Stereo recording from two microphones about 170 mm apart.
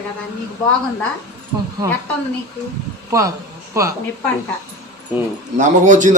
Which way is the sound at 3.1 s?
20° right (ahead or behind).